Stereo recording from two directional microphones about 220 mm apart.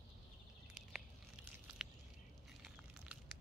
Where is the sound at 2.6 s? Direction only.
Centre (ahead or behind).